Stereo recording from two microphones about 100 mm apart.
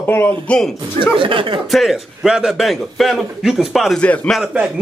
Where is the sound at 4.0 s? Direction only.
10° left (ahead or behind).